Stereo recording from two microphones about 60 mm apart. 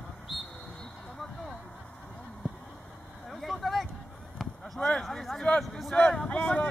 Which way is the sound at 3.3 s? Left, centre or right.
Centre.